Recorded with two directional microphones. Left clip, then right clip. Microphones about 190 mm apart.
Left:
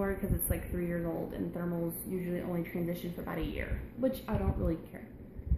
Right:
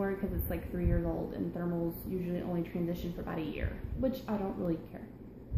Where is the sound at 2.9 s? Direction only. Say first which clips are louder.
Even; 15° left (ahead or behind).